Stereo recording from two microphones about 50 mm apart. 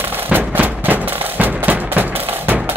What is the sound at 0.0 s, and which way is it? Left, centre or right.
Music, right.